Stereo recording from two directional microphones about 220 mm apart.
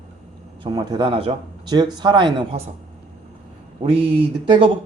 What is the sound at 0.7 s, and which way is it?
Speech, 20° right (ahead or behind).